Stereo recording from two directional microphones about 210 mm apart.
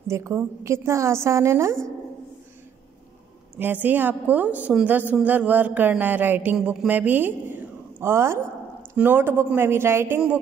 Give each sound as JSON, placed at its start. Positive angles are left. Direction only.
{"t": 0.1, "sound": "speech", "side_deg": -15}
{"t": 3.5, "sound": "speech", "side_deg": -10}